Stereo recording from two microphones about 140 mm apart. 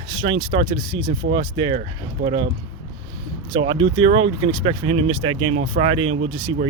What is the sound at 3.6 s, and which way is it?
Speech, 40° right (ahead or behind).